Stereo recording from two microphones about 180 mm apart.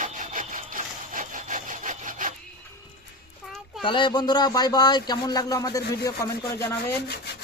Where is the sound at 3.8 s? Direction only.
25° left (ahead or behind).